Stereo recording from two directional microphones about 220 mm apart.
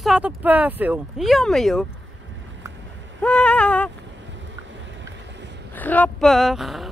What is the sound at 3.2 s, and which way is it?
Speech, 5° left (ahead or behind).